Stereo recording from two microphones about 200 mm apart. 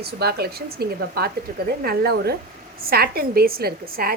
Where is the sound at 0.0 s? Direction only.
55° right (ahead or behind).